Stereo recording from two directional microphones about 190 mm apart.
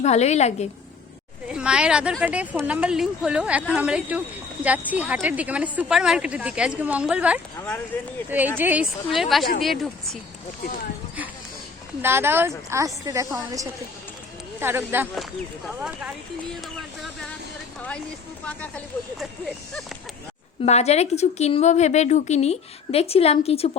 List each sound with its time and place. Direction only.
0.0 s a woman's voice: 35° left (ahead or behind)
1.5 s a woman's voice: 5° right (ahead or behind)
7.9 s speech: 10° left (ahead or behind)
8.5 s a woman's voice: 10° right (ahead or behind)
12.0 s a woman's voice: 10° right (ahead or behind)
15.1 s a woman's voice: centre (ahead or behind)
20.7 s a woman's voice: 35° left (ahead or behind)